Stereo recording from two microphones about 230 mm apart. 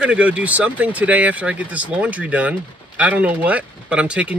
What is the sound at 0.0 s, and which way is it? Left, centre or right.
Speech, centre.